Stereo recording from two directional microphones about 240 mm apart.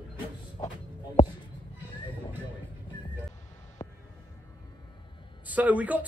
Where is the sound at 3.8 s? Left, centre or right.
Centre.